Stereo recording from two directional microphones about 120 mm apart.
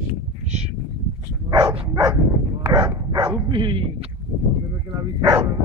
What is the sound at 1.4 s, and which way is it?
Dog, 35° right (ahead or behind).